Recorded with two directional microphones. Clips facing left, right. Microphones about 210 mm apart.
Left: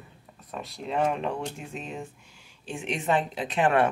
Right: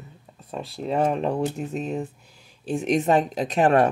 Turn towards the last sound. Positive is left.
turn(degrees=-40)  # may be behind; listen again after turning